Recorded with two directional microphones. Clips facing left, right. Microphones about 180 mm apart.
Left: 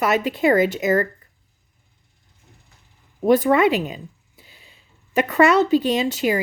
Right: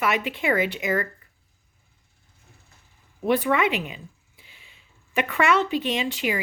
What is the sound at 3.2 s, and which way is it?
A woman's voice, 40° left (ahead or behind).